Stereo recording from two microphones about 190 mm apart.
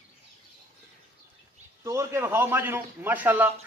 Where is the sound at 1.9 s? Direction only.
15° right (ahead or behind).